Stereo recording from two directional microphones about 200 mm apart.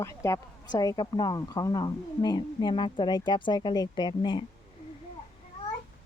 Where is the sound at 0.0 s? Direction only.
15° left (ahead or behind).